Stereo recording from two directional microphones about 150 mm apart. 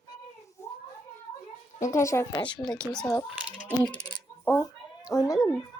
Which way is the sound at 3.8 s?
10° left (ahead or behind).